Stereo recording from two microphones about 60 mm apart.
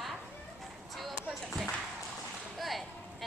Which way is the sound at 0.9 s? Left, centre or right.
Centre.